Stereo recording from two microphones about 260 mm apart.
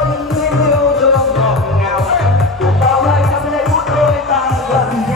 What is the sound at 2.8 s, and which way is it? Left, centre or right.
Music, centre.